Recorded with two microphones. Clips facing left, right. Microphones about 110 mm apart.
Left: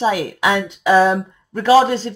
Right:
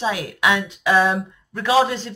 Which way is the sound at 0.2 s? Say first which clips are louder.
Left 3 dB; 35° left (ahead or behind).